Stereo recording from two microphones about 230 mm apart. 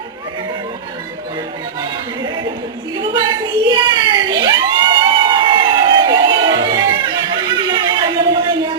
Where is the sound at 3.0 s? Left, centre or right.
Centre.